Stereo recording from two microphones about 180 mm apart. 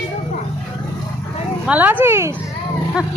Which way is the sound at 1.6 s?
10° right (ahead or behind).